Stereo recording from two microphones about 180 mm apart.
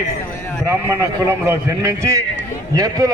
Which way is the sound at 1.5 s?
15° right (ahead or behind).